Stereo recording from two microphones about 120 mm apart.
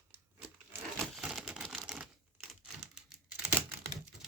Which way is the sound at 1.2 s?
5° right (ahead or behind).